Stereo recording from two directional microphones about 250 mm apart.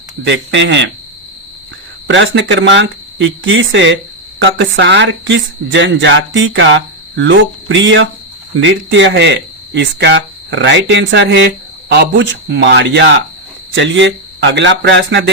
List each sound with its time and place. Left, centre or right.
0.3 s speech: right
2.0 s speech: right